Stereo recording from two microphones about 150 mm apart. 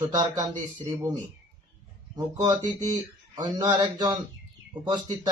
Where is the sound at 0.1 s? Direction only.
30° right (ahead or behind).